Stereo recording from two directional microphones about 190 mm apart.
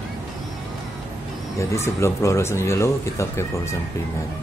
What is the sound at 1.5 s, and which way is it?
Speech, 15° left (ahead or behind).